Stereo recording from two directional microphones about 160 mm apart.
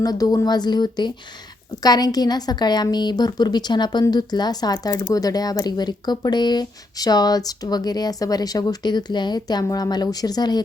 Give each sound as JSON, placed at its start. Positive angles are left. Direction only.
{"t": 0.0, "sound": "a woman's voice", "side_deg": 25}